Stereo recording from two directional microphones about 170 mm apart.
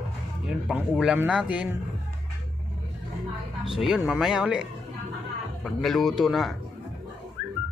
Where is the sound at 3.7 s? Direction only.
Centre (ahead or behind).